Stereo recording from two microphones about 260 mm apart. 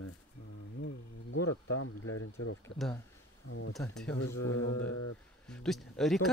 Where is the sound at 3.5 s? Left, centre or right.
Left.